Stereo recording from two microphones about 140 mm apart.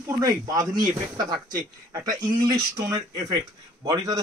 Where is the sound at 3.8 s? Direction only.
25° right (ahead or behind).